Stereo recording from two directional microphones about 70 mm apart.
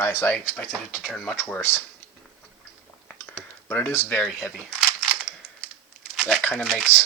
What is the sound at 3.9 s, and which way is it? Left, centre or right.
Speech, left.